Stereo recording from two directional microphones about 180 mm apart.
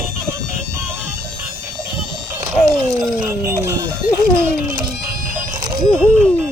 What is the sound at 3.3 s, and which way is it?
Speech, 15° right (ahead or behind).